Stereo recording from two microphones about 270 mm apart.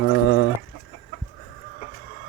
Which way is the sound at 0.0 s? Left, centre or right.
Left.